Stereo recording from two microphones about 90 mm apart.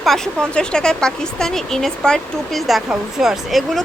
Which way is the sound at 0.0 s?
5° left (ahead or behind).